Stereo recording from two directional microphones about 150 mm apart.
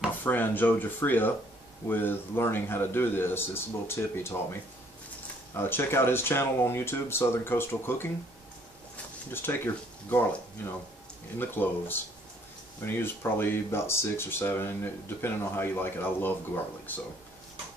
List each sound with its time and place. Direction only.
0.2 s speech: 10° left (ahead or behind)
9.3 s speech: 15° left (ahead or behind)
11.3 s speech: 15° left (ahead or behind)